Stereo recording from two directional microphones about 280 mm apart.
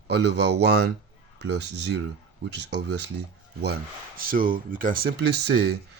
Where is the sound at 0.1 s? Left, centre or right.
Right.